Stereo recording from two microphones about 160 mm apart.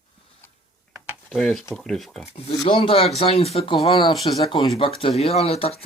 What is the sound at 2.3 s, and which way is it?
Speech, 40° left (ahead or behind).